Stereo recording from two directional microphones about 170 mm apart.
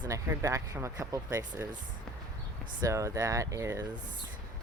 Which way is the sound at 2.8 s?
15° right (ahead or behind).